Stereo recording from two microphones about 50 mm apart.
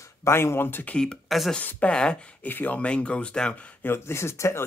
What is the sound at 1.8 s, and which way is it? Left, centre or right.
Speech, centre.